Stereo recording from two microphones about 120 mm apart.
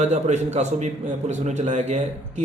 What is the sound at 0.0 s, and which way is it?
A man's voice, 70° right (ahead or behind).